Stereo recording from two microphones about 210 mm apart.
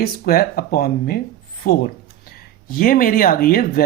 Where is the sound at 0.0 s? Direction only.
45° left (ahead or behind).